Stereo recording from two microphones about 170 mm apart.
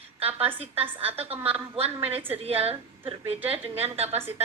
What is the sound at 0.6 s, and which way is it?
Speech, 35° right (ahead or behind).